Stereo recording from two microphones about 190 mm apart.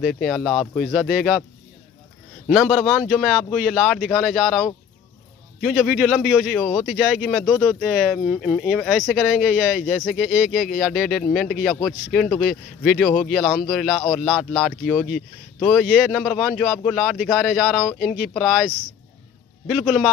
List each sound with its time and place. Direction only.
0.0 s speech: centre (ahead or behind)
2.5 s speech: centre (ahead or behind)
19.7 s speech: 5° right (ahead or behind)